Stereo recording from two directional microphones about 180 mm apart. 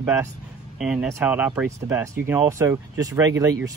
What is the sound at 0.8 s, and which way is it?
Speech, 5° right (ahead or behind).